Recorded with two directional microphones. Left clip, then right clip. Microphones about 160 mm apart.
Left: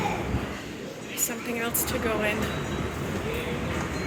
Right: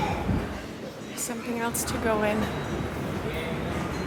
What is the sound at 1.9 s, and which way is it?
Speech, 25° right (ahead or behind).